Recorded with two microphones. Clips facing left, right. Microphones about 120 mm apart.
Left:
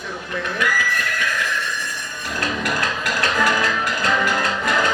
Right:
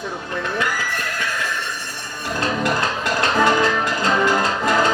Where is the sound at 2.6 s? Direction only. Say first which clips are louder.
Right 3 dB; 25° right (ahead or behind).